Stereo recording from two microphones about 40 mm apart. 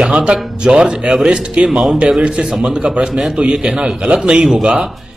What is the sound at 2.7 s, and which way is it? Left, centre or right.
A man's voice, right.